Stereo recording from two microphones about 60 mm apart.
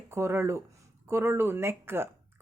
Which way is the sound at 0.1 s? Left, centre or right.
Right.